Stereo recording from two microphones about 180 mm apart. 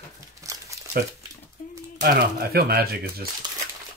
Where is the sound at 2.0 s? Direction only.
55° right (ahead or behind).